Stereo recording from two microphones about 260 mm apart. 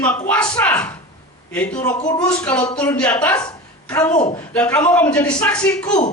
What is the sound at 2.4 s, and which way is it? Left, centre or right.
A woman's voice, centre.